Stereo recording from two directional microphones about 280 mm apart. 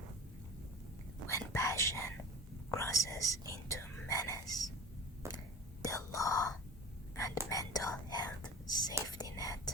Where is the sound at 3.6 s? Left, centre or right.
Centre.